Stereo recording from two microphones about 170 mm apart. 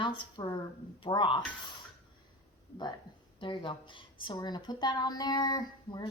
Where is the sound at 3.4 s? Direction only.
30° left (ahead or behind).